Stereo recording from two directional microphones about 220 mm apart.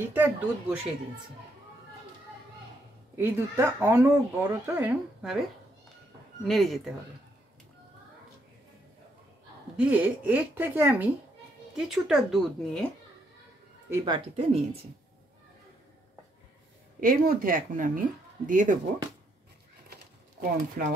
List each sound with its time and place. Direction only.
0.1 s speech: 10° right (ahead or behind)
3.2 s speech: 10° right (ahead or behind)
6.4 s a woman's voice: centre (ahead or behind)
9.8 s a woman's voice: 5° right (ahead or behind)
13.8 s speech: 15° right (ahead or behind)
17.0 s speech: 40° right (ahead or behind)
19.9 s a sound: 40° right (ahead or behind)